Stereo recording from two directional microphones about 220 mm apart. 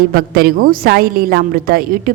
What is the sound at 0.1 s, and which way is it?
A woman's voice, 40° right (ahead or behind).